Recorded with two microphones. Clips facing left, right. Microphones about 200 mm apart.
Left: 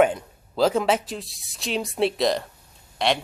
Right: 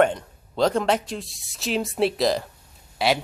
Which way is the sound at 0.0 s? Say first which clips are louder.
Left 1 dB; 5° left (ahead or behind).